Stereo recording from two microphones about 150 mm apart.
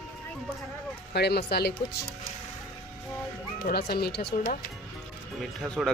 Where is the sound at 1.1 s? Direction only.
90° left.